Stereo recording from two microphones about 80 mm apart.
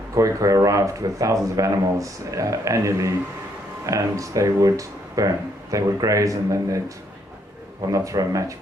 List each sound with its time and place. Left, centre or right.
0.1 s speech: right
7.9 s speech: right